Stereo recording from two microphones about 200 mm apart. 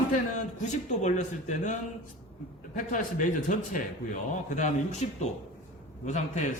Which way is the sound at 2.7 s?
40° left (ahead or behind).